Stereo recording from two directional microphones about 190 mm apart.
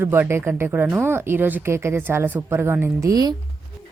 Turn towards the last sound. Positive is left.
turn(degrees=-20)  # may be behind; listen again after turning